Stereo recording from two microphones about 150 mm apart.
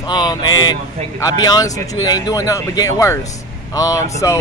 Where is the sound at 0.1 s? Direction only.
30° left (ahead or behind).